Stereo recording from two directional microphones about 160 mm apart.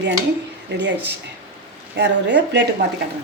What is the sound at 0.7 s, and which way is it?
Speech, 90° right.